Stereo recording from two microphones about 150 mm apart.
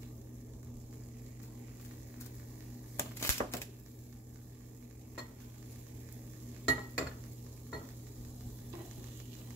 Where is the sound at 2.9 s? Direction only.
20° left (ahead or behind).